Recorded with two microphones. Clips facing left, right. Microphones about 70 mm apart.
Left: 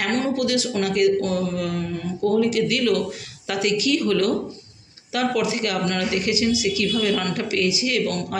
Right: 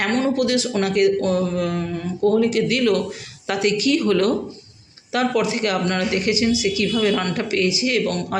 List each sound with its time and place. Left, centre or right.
0.0 s speech: right